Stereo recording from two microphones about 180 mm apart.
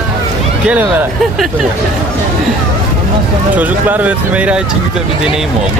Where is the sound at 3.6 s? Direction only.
10° right (ahead or behind).